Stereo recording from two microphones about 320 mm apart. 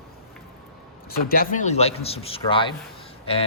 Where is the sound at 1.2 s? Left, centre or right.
Left.